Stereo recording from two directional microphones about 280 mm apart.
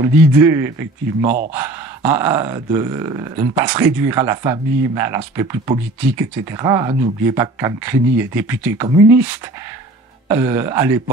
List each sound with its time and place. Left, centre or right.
0.0 s speech: centre
1.2 s speech: right
1.5 s speech: centre